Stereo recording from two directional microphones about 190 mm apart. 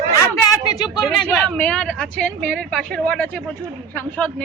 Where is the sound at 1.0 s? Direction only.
5° left (ahead or behind).